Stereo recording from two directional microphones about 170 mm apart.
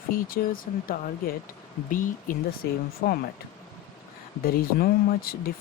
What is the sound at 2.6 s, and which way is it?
Speech, 65° left (ahead or behind).